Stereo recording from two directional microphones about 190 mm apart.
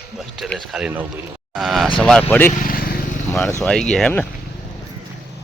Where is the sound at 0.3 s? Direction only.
Centre (ahead or behind).